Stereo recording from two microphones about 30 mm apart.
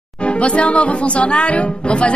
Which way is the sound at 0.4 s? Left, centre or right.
Left.